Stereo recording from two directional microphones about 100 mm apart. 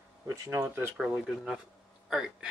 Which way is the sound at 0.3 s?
25° right (ahead or behind).